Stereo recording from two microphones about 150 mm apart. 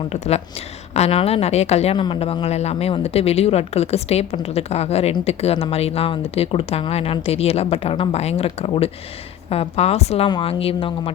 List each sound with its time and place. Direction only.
0.1 s speech: 45° left (ahead or behind)